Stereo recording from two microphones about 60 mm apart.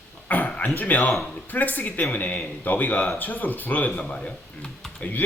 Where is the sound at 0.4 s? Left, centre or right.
Left.